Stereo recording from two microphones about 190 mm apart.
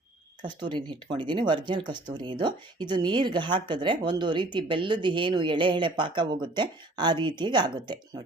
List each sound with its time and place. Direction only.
0.6 s speech: 25° right (ahead or behind)